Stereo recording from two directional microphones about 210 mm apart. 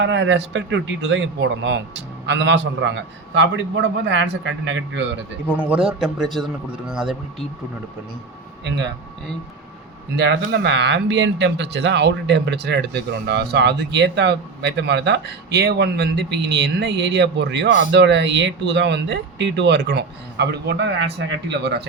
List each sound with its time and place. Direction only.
0.0 s speech: 60° right (ahead or behind)
5.5 s a man's voice: 5° right (ahead or behind)
10.2 s speech: 55° right (ahead or behind)